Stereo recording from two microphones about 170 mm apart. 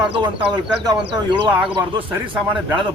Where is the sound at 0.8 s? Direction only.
20° right (ahead or behind).